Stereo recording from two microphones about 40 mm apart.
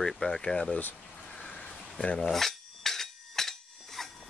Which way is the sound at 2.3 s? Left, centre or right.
Centre.